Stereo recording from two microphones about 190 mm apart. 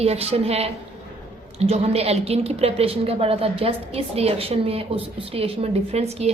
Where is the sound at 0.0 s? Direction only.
35° right (ahead or behind).